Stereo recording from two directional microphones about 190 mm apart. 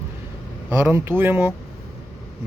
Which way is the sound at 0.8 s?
10° right (ahead or behind).